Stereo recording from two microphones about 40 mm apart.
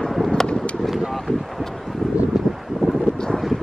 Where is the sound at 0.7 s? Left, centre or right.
Centre.